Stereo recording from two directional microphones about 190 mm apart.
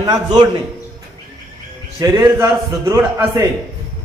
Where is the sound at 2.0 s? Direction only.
15° right (ahead or behind).